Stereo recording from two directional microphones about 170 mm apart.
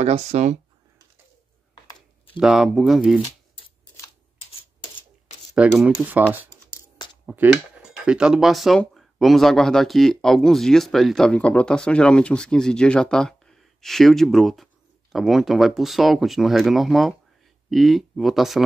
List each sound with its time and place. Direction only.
0.0 s speech: 40° right (ahead or behind)
1.9 s a sound: 25° left (ahead or behind)
2.3 s speech: 5° right (ahead or behind)
5.5 s speech: centre (ahead or behind)
7.2 s speech: centre (ahead or behind)